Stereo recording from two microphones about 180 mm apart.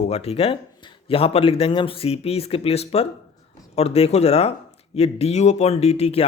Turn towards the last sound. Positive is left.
turn(degrees=35)  # may be behind; listen again after turning